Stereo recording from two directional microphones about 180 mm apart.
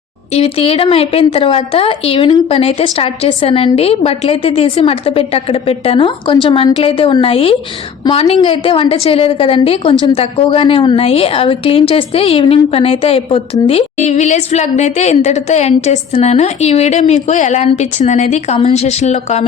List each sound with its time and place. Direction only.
0.3 s a woman's voice: 35° left (ahead or behind)